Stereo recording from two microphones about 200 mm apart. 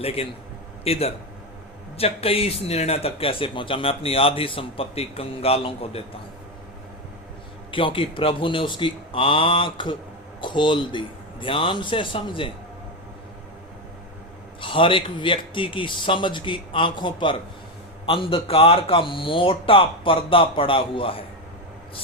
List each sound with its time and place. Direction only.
0.0 s a man's voice: 30° left (ahead or behind)
7.7 s a man's voice: 25° left (ahead or behind)
14.6 s a man's voice: 25° left (ahead or behind)